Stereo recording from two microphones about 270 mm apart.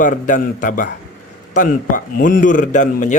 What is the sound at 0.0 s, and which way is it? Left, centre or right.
A man's voice, left.